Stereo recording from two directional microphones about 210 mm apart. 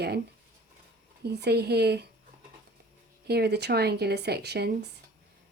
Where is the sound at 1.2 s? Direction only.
50° right (ahead or behind).